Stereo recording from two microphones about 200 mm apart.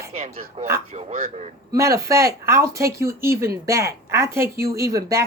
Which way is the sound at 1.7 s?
15° right (ahead or behind).